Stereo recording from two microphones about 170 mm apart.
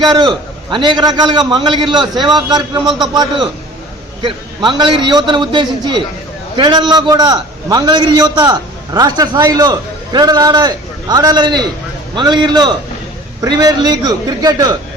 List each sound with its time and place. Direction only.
0.2 s a man's voice: 25° right (ahead or behind)